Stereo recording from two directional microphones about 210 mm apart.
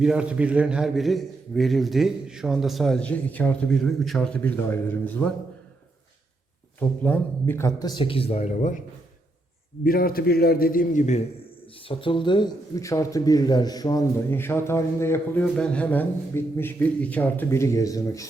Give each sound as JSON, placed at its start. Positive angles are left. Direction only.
{"t": 0.0, "sound": "a man's voice", "side_deg": -5}
{"t": 6.7, "sound": "a man's voice", "side_deg": 10}
{"t": 9.8, "sound": "a man's voice", "side_deg": 45}
{"t": 11.9, "sound": "a man's voice", "side_deg": 25}